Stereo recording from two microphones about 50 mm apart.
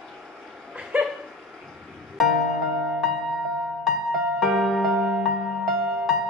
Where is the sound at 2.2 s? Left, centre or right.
Centre.